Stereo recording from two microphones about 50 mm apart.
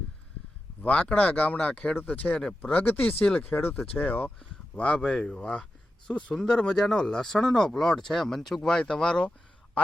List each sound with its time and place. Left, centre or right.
0.8 s speech: left
2.6 s speech: left
4.4 s speech: left